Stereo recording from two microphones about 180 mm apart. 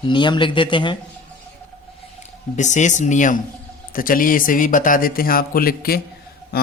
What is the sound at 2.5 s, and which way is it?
A man's voice, 40° left (ahead or behind).